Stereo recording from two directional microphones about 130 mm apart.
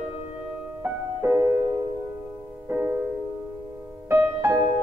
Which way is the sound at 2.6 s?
15° right (ahead or behind).